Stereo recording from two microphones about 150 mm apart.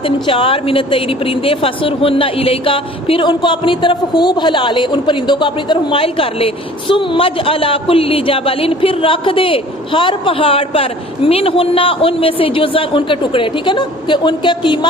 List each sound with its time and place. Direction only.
0.0 s a woman's voice: 35° left (ahead or behind)